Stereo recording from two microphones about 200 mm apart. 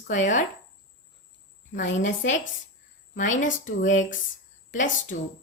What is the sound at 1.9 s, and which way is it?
Speech, 65° left (ahead or behind).